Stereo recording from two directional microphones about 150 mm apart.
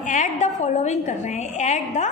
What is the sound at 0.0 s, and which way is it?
A woman's voice, 55° left (ahead or behind).